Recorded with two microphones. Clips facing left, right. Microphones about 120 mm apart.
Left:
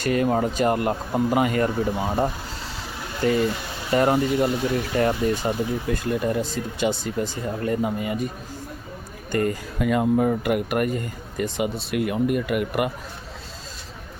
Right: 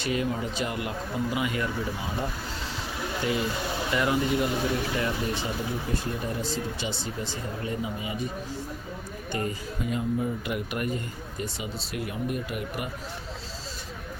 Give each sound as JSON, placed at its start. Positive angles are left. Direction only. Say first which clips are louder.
{"t": 0.0, "sound": "speech", "louder": "left 7 dB", "side_deg": 50}
{"t": 9.3, "sound": "speech", "louder": "left 8 dB", "side_deg": 50}
{"t": 9.7, "sound": "speech", "louder": "left 9 dB", "side_deg": 70}